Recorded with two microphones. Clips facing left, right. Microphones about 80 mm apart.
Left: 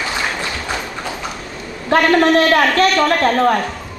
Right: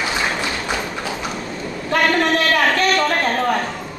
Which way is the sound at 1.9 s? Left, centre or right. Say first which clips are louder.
Left 5 dB; left.